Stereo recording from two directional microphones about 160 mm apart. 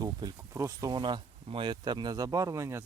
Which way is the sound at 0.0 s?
25° right (ahead or behind).